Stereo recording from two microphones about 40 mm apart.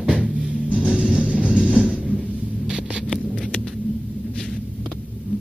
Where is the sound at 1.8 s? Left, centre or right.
Right.